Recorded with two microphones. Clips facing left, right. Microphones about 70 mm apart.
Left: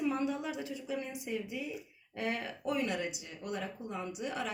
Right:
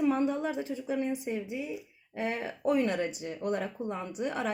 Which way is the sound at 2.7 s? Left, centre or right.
Right.